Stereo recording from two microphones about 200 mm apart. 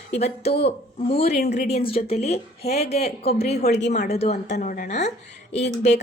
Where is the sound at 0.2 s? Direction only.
30° left (ahead or behind).